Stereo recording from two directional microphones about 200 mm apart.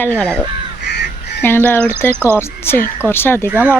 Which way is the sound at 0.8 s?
55° left (ahead or behind).